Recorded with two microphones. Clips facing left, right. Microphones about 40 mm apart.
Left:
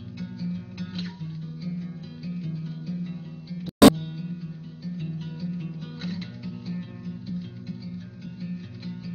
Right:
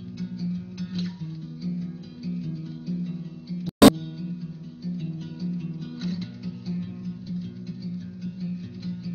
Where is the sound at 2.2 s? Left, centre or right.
Left.